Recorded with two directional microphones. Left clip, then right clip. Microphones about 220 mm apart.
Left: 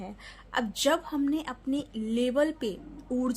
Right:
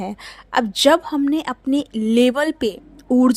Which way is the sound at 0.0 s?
45° right (ahead or behind).